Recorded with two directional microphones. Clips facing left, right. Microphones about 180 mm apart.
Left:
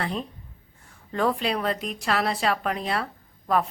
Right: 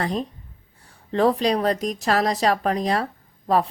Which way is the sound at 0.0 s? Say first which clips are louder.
Right 4 dB; 40° right (ahead or behind).